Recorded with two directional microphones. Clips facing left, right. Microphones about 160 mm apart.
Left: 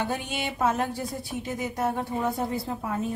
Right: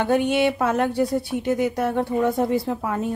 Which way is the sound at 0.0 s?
65° right (ahead or behind).